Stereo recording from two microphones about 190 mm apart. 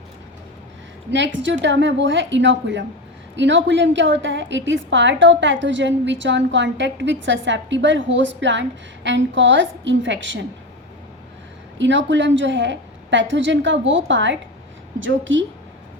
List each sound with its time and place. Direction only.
1.1 s a woman's voice: 70° right (ahead or behind)
11.8 s a woman's voice: 75° right (ahead or behind)